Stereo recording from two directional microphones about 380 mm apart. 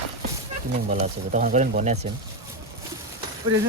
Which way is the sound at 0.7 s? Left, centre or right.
Centre.